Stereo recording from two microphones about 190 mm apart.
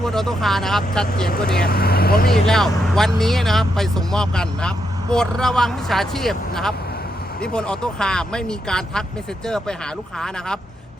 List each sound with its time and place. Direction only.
0.0 s speech: centre (ahead or behind)
1.6 s speech: 55° left (ahead or behind)
2.3 s speech: centre (ahead or behind)